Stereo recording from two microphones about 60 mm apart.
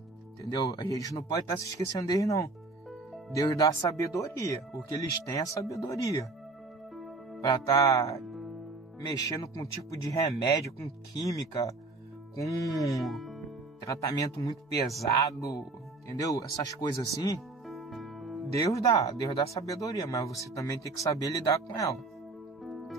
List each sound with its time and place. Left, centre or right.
0.4 s speech: left
4.8 s speech: left
7.6 s speech: left
9.1 s speech: left
11.1 s speech: left
13.0 s speech: centre
13.8 s speech: left
17.6 s music: centre
18.7 s speech: left
22.6 s music: centre